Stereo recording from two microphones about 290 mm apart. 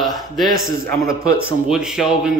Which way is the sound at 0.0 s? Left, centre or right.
Centre.